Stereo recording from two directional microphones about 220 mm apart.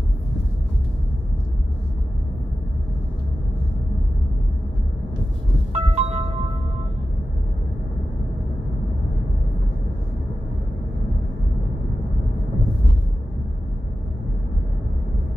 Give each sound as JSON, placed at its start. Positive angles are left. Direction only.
{"t": 5.7, "sound": "music", "side_deg": -30}